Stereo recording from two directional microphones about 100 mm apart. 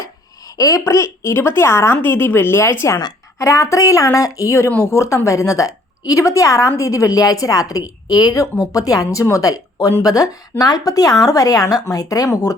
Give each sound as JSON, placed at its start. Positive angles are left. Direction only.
{"t": 0.5, "sound": "a woman's voice", "side_deg": 35}